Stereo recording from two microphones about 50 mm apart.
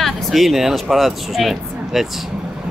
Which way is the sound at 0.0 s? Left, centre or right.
Centre.